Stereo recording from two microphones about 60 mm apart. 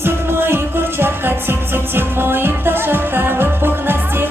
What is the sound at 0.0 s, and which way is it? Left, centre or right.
Music, right.